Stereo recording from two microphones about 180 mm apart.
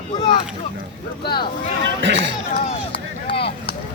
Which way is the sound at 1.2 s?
25° left (ahead or behind).